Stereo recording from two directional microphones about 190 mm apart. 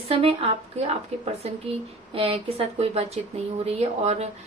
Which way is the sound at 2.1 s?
30° right (ahead or behind).